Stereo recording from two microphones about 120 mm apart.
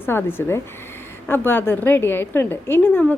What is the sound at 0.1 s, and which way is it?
A woman's voice, 15° left (ahead or behind).